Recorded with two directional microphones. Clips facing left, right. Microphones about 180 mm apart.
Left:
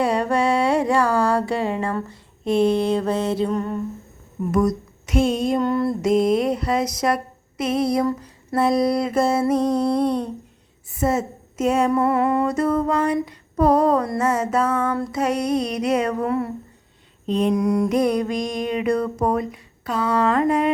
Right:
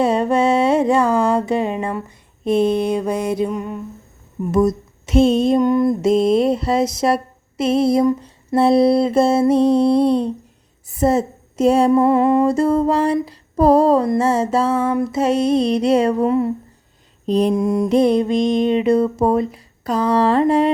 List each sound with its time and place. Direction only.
0.0 s music: 20° right (ahead or behind)
4.5 s mantra: 25° right (ahead or behind)
17.2 s mantra: 35° right (ahead or behind)
19.8 s a sound: 35° right (ahead or behind)